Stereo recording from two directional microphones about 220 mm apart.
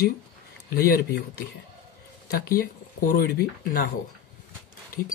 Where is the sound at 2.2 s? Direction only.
40° left (ahead or behind).